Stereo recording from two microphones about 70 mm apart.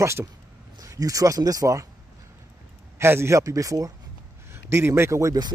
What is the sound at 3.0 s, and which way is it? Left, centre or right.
Speech, right.